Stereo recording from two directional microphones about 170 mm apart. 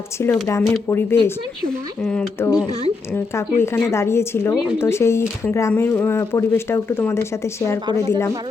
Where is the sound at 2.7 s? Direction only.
40° right (ahead or behind).